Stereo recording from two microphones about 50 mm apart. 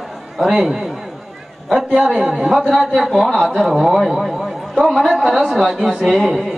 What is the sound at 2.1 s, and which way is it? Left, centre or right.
Speech, centre.